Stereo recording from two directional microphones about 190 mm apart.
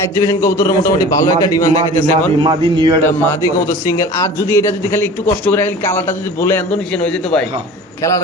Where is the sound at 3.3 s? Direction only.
15° left (ahead or behind).